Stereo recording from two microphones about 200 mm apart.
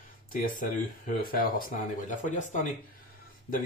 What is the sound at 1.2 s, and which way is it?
Speech, 45° left (ahead or behind).